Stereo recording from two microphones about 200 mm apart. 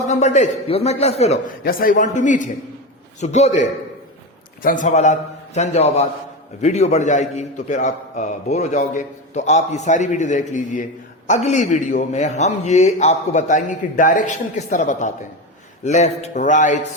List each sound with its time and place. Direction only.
0.1 s a man's voice: 35° left (ahead or behind)
1.6 s a man's voice: 45° left (ahead or behind)
4.6 s a man's voice: 40° left (ahead or behind)